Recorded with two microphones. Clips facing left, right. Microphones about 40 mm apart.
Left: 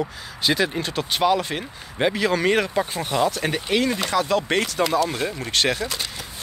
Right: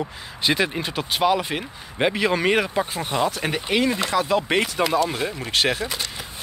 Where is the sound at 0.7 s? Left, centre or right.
Centre.